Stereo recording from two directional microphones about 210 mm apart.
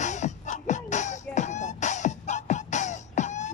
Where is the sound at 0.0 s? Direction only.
35° left (ahead or behind).